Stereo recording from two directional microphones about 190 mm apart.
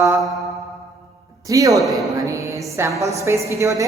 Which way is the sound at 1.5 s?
20° right (ahead or behind).